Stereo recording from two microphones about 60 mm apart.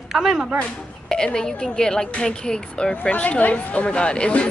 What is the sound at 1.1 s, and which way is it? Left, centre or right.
A woman's voice, centre.